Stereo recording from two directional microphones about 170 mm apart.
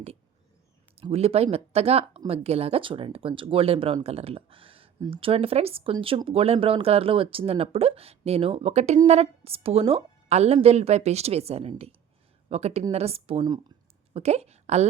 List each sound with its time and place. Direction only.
0.9 s a woman's voice: 35° right (ahead or behind)